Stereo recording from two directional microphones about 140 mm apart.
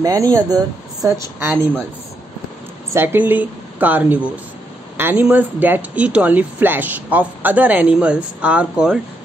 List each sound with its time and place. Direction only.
0.0 s speech: 25° right (ahead or behind)
2.9 s speech: 15° right (ahead or behind)